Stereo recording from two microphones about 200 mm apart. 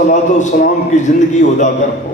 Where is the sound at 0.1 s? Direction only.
35° left (ahead or behind).